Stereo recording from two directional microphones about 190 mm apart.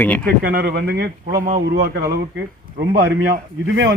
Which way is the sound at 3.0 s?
60° right (ahead or behind).